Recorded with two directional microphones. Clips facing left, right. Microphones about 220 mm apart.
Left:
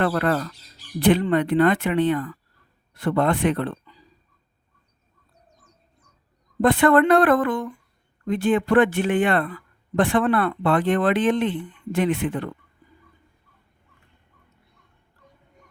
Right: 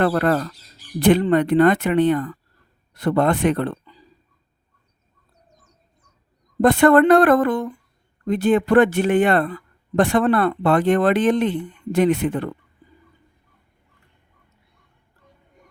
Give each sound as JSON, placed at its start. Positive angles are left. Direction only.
{"t": 0.0, "sound": "speech", "side_deg": -40}
{"t": 6.6, "sound": "speech", "side_deg": -45}